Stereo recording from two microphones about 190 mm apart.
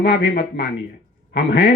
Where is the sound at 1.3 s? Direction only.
65° left (ahead or behind).